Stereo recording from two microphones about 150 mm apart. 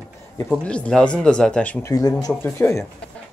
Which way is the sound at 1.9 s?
25° left (ahead or behind).